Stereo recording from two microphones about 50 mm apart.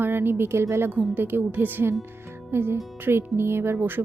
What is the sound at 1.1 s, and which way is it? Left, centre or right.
Speech, right.